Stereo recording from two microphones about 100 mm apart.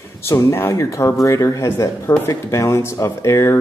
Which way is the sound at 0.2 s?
30° left (ahead or behind).